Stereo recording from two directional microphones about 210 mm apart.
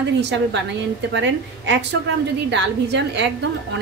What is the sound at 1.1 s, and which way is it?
A woman's voice, 60° right (ahead or behind).